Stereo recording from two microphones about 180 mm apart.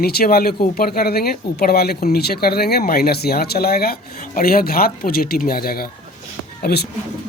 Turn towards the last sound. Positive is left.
turn(degrees=65)  # may be behind; listen again after turning